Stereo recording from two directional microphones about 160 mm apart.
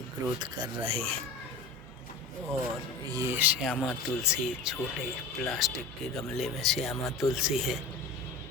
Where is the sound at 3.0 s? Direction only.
20° right (ahead or behind); by 7.8 s centre (ahead or behind).